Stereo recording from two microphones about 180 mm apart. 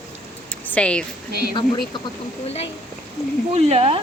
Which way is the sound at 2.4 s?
35° left (ahead or behind).